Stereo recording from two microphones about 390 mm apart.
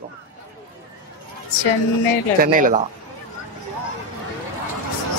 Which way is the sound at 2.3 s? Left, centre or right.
Right.